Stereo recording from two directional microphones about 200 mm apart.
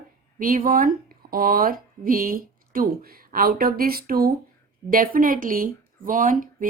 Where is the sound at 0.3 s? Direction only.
45° right (ahead or behind).